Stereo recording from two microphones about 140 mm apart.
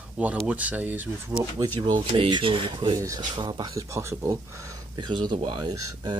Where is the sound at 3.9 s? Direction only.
20° right (ahead or behind).